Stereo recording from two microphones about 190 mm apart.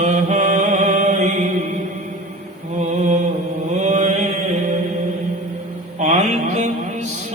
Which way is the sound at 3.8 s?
35° right (ahead or behind).